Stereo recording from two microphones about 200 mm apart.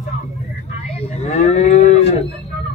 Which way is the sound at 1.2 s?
35° left (ahead or behind).